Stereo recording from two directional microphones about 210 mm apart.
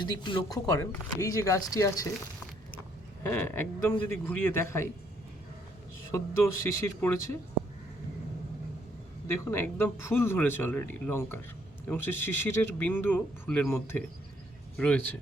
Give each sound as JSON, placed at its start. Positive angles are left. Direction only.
{"t": 0.0, "sound": "speech", "side_deg": 20}
{"t": 3.2, "sound": "speech", "side_deg": 10}
{"t": 6.1, "sound": "speech", "side_deg": 15}
{"t": 9.2, "sound": "speech", "side_deg": 10}